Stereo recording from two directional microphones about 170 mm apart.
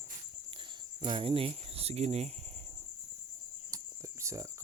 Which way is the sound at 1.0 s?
30° right (ahead or behind).